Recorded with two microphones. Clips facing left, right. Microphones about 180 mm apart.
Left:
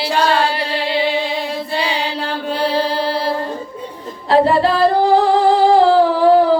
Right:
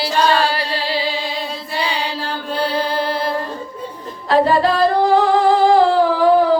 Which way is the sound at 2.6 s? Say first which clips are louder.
Left 2 dB; 30° left (ahead or behind).